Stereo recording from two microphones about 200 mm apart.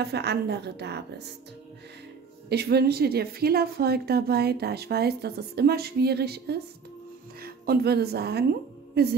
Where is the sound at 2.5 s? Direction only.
55° right (ahead or behind).